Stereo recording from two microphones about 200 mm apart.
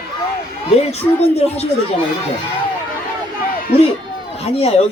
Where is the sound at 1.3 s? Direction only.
30° left (ahead or behind).